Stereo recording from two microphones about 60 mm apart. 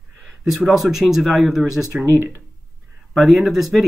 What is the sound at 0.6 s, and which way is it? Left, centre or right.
Speech, centre.